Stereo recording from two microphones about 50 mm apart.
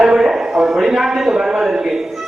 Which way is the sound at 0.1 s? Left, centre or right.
Centre.